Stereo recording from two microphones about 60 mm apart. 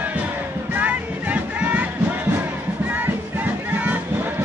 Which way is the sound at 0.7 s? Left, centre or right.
Right.